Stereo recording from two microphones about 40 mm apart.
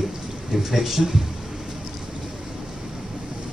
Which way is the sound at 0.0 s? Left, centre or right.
Centre.